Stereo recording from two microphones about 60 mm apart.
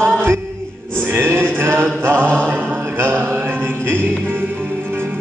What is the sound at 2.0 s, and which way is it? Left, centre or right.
Music, right.